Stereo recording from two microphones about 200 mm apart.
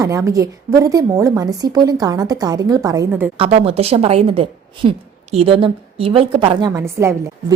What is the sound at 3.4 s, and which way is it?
A woman's voice, 30° right (ahead or behind).